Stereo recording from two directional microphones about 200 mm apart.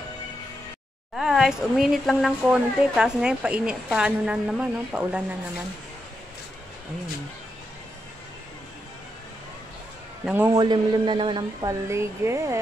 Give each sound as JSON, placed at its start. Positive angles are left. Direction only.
{"t": 1.1, "sound": "speech", "side_deg": 0}
{"t": 10.2, "sound": "a man's voice", "side_deg": -10}
{"t": 10.6, "sound": "speech", "side_deg": -20}